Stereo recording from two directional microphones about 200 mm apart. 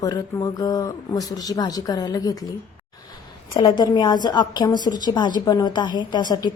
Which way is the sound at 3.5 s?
20° left (ahead or behind).